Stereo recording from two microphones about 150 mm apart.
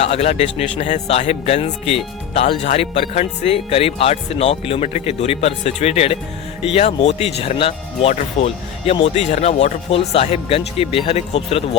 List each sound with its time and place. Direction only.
0.0 s speech: 45° left (ahead or behind)